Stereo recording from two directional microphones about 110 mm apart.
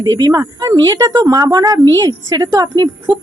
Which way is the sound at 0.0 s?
35° right (ahead or behind).